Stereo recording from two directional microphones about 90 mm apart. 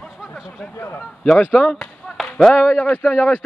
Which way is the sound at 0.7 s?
25° left (ahead or behind).